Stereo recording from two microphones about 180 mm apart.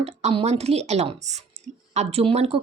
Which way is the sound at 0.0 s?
35° right (ahead or behind).